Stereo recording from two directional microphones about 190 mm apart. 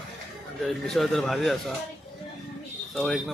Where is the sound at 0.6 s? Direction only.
Centre (ahead or behind).